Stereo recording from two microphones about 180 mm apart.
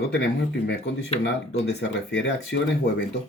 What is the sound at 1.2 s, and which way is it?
Speech, 70° left (ahead or behind).